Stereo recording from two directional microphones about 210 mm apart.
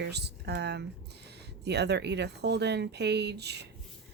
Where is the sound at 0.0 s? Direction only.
50° right (ahead or behind).